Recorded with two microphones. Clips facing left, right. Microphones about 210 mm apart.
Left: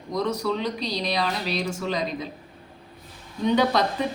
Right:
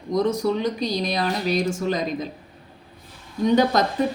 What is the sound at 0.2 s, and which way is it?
A woman's voice, 50° right (ahead or behind).